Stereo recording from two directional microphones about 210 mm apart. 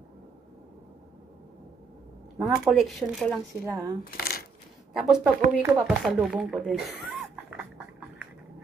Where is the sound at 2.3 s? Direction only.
Centre (ahead or behind).